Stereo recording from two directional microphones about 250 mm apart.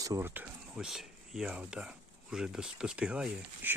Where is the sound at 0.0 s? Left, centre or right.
Centre.